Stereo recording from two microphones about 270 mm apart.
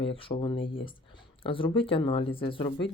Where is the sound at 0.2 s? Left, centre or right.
Centre.